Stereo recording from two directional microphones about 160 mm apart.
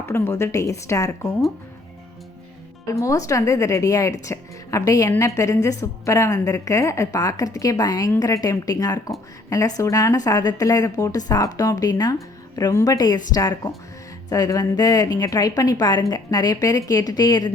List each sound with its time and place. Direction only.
0.0 s speech: 15° left (ahead or behind)
2.8 s speech: 20° left (ahead or behind)